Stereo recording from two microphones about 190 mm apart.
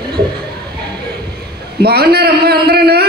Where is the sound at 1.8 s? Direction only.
55° right (ahead or behind).